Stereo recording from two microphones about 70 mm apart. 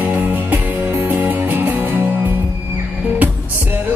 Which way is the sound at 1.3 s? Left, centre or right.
Right.